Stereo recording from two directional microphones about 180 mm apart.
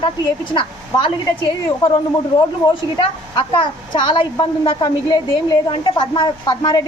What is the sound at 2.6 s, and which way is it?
A woman's voice, 25° left (ahead or behind).